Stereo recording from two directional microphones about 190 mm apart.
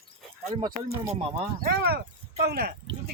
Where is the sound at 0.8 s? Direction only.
35° right (ahead or behind).